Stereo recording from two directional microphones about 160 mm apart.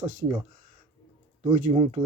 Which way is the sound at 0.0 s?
50° right (ahead or behind).